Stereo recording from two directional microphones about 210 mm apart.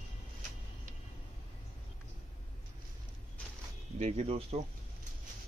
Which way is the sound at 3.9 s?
30° right (ahead or behind).